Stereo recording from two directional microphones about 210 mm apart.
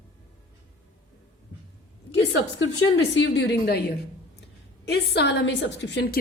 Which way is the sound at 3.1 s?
55° left (ahead or behind).